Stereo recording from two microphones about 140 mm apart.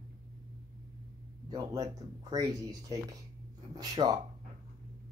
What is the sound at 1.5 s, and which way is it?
Speech, 25° right (ahead or behind).